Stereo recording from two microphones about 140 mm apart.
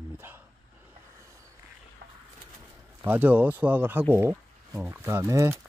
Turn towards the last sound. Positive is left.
turn(degrees=-20)  # may be behind; listen again after turning